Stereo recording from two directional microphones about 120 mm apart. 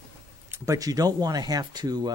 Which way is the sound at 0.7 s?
30° right (ahead or behind).